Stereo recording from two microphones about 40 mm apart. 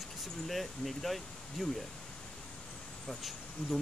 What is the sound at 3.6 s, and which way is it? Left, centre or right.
Speech, centre.